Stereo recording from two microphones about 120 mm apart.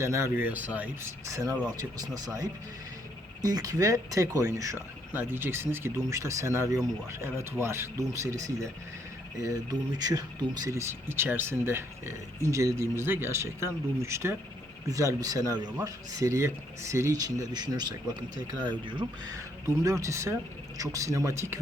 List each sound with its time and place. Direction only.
0.0 s speech: 25° right (ahead or behind)
1.3 s speech: 30° right (ahead or behind)
19.6 s speech: 25° right (ahead or behind)